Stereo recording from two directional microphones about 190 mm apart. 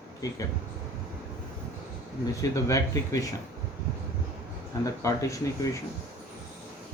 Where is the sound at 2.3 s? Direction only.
15° left (ahead or behind).